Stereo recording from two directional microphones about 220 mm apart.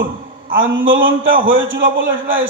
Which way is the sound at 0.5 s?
60° right (ahead or behind).